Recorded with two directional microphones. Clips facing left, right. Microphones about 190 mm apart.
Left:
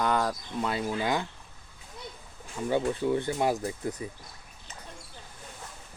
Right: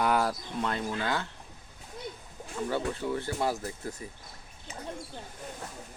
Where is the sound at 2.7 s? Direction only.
20° left (ahead or behind).